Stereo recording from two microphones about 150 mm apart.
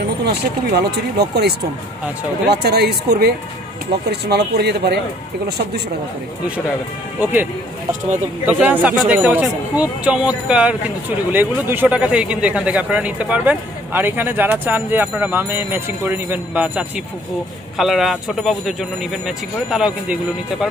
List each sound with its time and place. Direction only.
0.2 s speech: 90° right
8.5 s speech: 10° right (ahead or behind)